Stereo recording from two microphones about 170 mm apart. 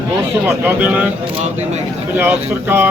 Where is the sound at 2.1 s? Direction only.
10° right (ahead or behind).